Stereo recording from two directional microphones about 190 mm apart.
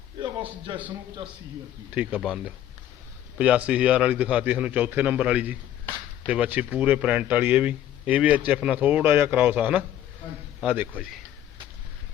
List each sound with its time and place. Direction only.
0.2 s a man's voice: 25° right (ahead or behind)
2.0 s a man's voice: 5° right (ahead or behind)